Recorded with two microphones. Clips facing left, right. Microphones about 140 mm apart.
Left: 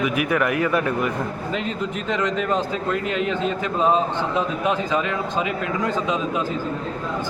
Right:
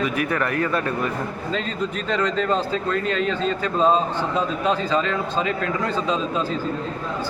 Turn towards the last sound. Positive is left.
turn(degrees=15)  # may be behind; listen again after turning